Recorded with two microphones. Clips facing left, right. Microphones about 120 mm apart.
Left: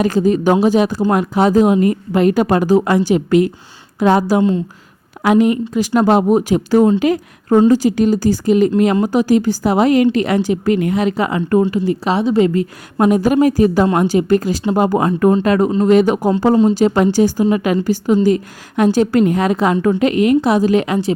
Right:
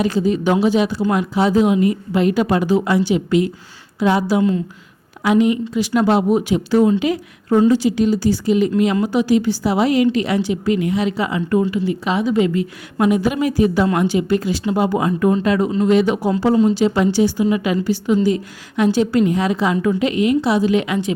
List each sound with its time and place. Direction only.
0.0 s a woman's voice: 50° left (ahead or behind)
11.7 s a woman's voice: 40° left (ahead or behind)